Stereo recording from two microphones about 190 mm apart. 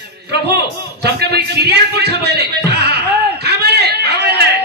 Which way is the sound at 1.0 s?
60° right (ahead or behind).